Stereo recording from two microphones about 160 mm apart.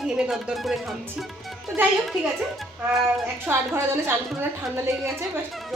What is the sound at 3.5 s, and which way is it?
Speech, 15° right (ahead or behind).